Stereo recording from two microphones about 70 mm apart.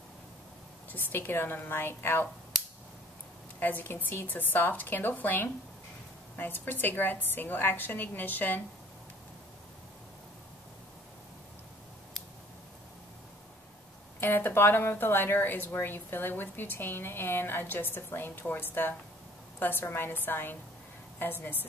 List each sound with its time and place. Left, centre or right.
0.9 s a woman's voice: left
3.5 s a woman's voice: left
14.2 s a woman's voice: left